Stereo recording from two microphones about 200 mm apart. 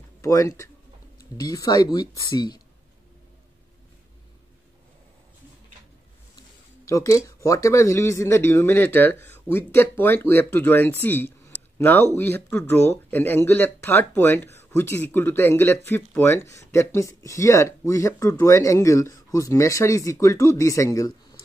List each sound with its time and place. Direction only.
0.2 s speech: 15° left (ahead or behind)
6.9 s speech: 15° left (ahead or behind)